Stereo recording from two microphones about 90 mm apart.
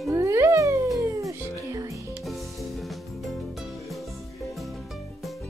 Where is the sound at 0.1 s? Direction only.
35° right (ahead or behind).